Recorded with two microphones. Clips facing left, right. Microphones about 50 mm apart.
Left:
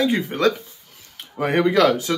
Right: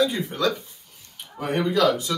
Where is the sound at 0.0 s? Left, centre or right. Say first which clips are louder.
Left 3 dB; left.